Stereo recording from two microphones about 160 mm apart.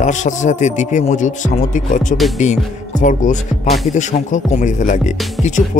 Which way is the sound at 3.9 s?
50° left (ahead or behind).